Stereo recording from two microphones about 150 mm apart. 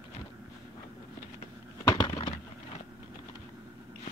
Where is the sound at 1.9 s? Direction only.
30° left (ahead or behind).